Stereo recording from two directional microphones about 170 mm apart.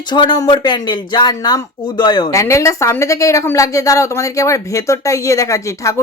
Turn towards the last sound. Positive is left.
turn(degrees=20)  # may be behind; listen again after turning